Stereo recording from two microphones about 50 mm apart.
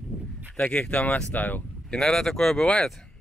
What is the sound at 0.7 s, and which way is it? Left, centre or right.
Speech, left.